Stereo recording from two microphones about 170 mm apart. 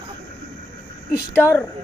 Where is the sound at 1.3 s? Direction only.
15° left (ahead or behind).